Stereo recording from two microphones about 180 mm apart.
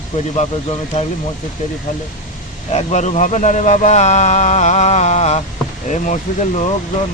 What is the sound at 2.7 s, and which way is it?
Speech, 40° left (ahead or behind).